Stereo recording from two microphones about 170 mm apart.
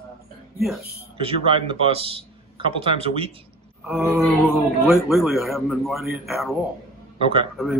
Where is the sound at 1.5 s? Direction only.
30° right (ahead or behind).